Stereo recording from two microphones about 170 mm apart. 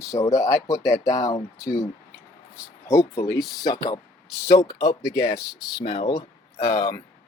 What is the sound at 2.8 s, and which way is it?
Speech, 15° left (ahead or behind).